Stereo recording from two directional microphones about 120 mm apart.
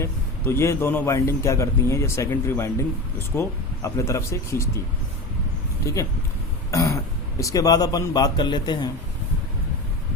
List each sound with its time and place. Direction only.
0.0 s a man's voice: 20° left (ahead or behind)
5.8 s speech: 25° left (ahead or behind)